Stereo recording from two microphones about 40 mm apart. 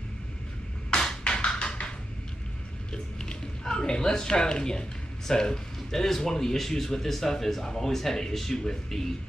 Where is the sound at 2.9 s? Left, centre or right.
Left.